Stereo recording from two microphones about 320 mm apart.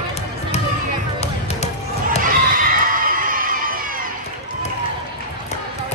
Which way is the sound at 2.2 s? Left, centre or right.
Right.